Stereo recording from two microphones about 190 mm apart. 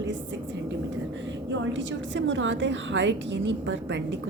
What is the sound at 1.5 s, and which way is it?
A woman's voice, 75° right (ahead or behind).